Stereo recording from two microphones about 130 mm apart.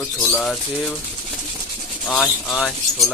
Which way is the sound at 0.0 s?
15° left (ahead or behind).